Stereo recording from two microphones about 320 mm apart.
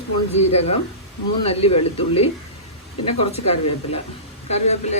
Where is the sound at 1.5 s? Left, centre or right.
Centre.